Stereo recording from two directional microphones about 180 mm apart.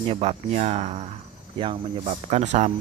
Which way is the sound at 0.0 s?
35° right (ahead or behind).